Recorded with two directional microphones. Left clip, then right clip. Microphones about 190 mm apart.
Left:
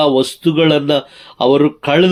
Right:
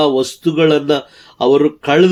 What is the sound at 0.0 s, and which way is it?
Speech, 30° left (ahead or behind).